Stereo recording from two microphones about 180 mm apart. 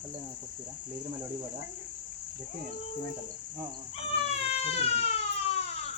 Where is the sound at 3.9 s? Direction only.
35° left (ahead or behind).